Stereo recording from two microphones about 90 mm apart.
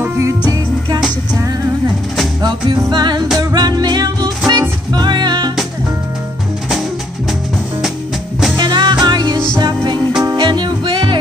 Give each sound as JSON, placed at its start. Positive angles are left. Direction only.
{"t": 2.9, "sound": "music", "side_deg": -55}
{"t": 8.5, "sound": "music", "side_deg": -55}